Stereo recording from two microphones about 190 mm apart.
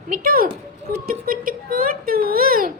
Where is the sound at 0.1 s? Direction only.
50° right (ahead or behind).